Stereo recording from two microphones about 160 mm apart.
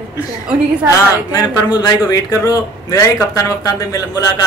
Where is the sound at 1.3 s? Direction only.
20° left (ahead or behind).